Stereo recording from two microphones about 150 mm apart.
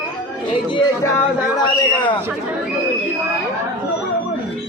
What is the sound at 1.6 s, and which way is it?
Speech, 30° left (ahead or behind).